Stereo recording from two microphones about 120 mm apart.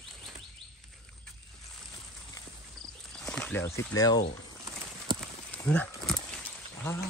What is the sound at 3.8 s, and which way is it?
Speech, 30° left (ahead or behind).